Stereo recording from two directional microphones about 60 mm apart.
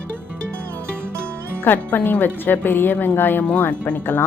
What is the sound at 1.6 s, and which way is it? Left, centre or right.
A woman's voice, left.